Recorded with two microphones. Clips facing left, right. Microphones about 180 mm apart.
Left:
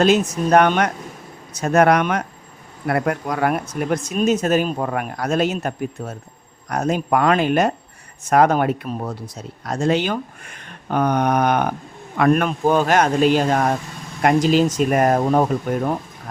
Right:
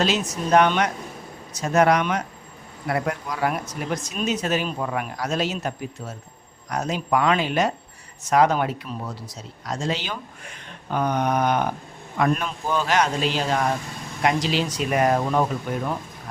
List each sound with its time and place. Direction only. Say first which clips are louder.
0.0 s speech: left 7 dB; 50° left (ahead or behind)